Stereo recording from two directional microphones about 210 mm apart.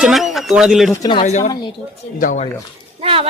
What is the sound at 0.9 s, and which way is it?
Speech, 15° left (ahead or behind).